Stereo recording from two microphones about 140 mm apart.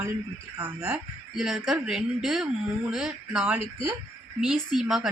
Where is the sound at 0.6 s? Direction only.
15° right (ahead or behind).